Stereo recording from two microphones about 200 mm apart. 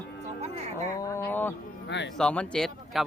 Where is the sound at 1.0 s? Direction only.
15° left (ahead or behind).